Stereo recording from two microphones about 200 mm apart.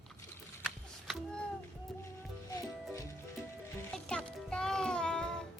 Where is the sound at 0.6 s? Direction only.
Centre (ahead or behind).